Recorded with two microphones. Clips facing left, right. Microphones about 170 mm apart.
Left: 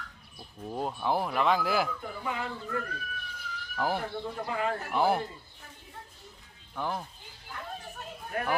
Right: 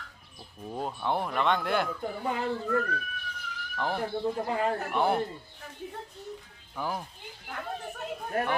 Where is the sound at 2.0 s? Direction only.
35° right (ahead or behind).